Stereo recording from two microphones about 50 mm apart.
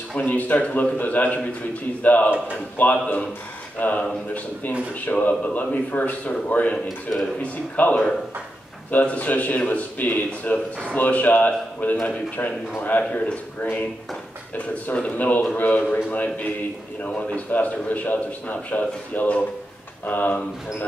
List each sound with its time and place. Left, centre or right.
0.2 s a man's voice: left
5.0 s a man's voice: left
15.1 s a man's voice: left
17.5 s a man's voice: left